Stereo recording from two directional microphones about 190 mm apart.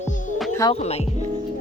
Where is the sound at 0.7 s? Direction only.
35° left (ahead or behind).